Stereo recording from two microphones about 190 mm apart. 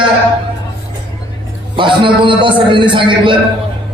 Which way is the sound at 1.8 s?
25° right (ahead or behind).